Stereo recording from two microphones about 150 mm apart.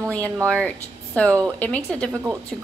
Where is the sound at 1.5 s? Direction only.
10° left (ahead or behind).